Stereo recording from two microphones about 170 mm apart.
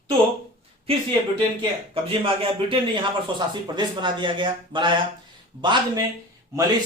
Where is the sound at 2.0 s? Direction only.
35° right (ahead or behind).